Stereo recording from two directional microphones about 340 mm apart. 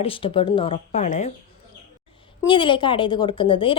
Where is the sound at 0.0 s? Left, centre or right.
Centre.